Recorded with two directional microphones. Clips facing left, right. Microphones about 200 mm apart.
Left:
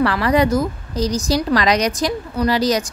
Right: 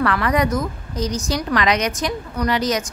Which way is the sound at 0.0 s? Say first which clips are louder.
Left 3 dB; 30° left (ahead or behind).